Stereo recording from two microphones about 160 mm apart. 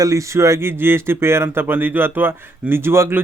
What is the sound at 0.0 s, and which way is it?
Speech, 20° right (ahead or behind).